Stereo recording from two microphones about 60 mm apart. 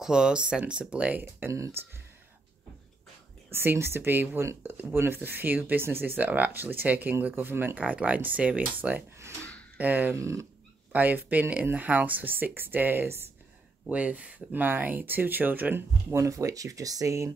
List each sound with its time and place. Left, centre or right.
0.0 s speech: centre
1.2 s speech: right
3.5 s speech: right
7.8 s speech: right
10.1 s speech: right
10.9 s speech: right
13.8 s speech: right
16.1 s speech: right